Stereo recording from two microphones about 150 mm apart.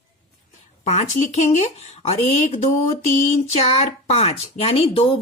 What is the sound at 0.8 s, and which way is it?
Speech, 45° left (ahead or behind).